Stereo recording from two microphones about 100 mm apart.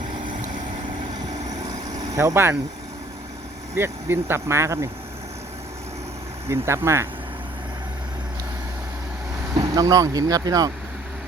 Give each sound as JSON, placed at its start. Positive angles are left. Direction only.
{"t": 2.1, "sound": "speech", "side_deg": -30}
{"t": 3.8, "sound": "speech", "side_deg": -25}
{"t": 6.5, "sound": "speech", "side_deg": -25}
{"t": 9.6, "sound": "speech", "side_deg": -35}